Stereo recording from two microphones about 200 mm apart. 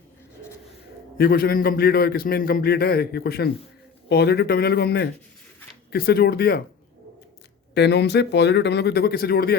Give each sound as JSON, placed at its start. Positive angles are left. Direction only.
{"t": 1.2, "sound": "a man's voice", "side_deg": 50}
{"t": 7.7, "sound": "speech", "side_deg": 55}